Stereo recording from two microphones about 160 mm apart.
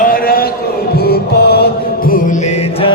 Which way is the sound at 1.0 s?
80° left.